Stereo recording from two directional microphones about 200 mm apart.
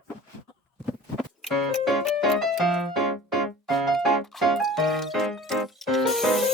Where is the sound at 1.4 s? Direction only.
Centre (ahead or behind).